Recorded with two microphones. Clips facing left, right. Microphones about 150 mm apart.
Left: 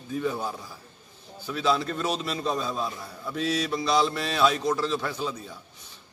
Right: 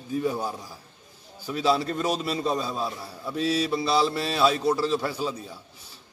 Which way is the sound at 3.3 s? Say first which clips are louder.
Right 2 dB; 30° right (ahead or behind).